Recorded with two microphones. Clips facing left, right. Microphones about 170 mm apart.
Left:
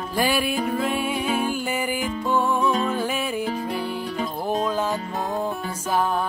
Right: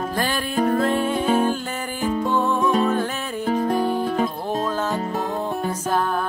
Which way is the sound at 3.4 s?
45° right (ahead or behind).